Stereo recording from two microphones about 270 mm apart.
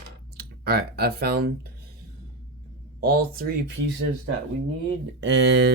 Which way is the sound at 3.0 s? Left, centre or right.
Right.